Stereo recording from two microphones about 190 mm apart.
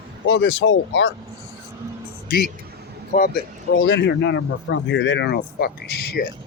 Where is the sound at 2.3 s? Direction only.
55° left (ahead or behind).